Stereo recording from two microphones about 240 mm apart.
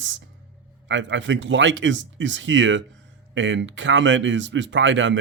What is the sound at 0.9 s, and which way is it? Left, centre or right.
Speech, right.